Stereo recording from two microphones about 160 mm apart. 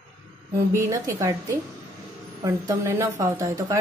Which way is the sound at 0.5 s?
15° right (ahead or behind).